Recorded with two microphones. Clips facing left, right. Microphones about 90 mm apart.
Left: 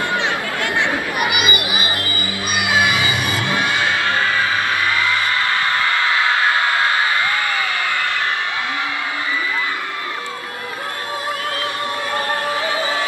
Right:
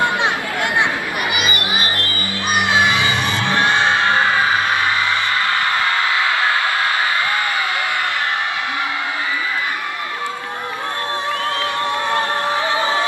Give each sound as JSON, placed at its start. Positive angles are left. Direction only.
{"t": 1.3, "sound": "music", "side_deg": 10}
{"t": 3.7, "sound": "music", "side_deg": -25}